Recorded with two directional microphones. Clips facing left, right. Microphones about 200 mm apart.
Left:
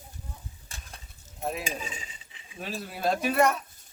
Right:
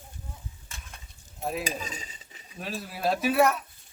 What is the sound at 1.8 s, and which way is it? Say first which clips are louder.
Cutlery: right 1 dB; 40° right (ahead or behind).